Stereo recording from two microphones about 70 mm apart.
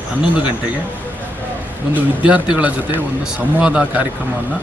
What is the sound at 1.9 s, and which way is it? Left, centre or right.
A man's voice, centre.